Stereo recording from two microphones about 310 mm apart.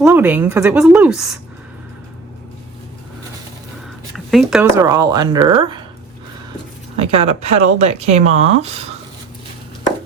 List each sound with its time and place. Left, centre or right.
0.0 s a woman's voice: centre
4.3 s speech: centre
6.9 s speech: centre